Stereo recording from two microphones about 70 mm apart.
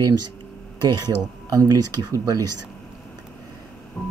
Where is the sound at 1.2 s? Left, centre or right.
Right.